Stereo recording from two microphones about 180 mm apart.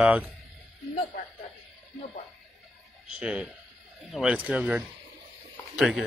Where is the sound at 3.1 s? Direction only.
5° right (ahead or behind).